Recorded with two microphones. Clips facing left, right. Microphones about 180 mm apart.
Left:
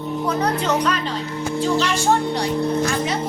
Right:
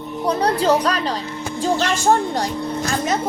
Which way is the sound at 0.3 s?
35° right (ahead or behind).